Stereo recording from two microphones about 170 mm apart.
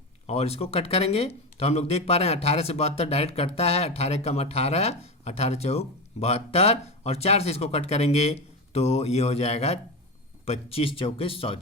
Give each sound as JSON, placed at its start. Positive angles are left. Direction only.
{"t": 0.3, "sound": "speech", "side_deg": 35}